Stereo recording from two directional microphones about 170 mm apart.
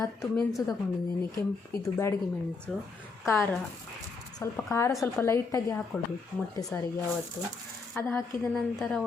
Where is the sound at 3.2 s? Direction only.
15° left (ahead or behind).